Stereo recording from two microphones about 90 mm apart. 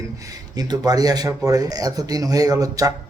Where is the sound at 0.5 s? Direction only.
45° right (ahead or behind).